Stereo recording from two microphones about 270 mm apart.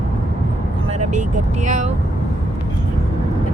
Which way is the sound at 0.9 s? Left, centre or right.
Right.